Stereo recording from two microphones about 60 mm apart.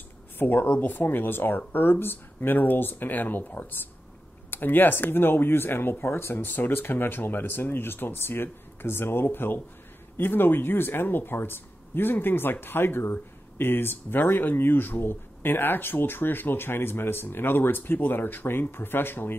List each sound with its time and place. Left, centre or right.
0.4 s speech: left